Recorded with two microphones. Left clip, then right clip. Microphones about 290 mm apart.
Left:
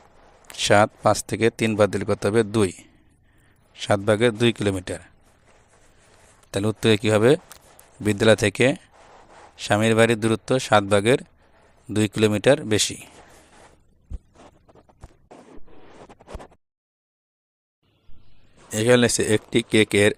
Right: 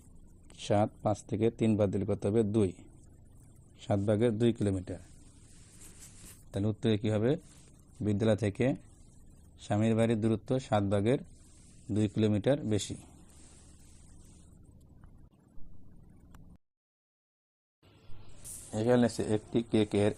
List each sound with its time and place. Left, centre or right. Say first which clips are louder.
0.4 s speech: left 13 dB; left
3.8 s speech: left 10 dB; left
6.5 s speech: left 12 dB; left
18.7 s speech: left 10 dB; left